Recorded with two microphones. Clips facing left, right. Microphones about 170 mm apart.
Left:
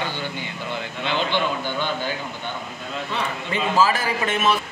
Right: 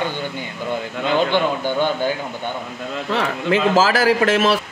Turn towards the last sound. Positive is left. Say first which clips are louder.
# right 6 dB
turn(degrees=-90)